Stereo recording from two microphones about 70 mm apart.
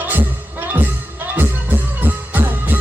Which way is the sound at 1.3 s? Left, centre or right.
Right.